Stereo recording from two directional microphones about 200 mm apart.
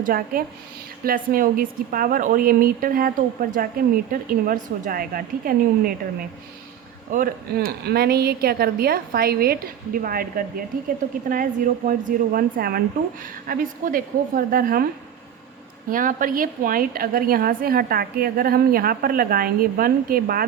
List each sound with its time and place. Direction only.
0.0 s a woman's voice: 45° right (ahead or behind)
15.9 s a woman's voice: 45° right (ahead or behind)